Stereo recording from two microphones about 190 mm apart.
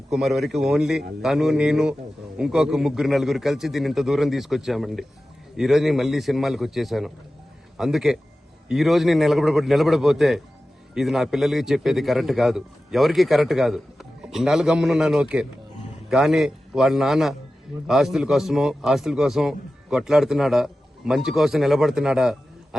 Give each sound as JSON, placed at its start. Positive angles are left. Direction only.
{"t": 0.1, "sound": "a man's voice", "side_deg": 0}